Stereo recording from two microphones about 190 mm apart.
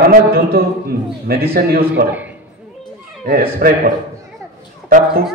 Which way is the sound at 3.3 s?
50° right (ahead or behind).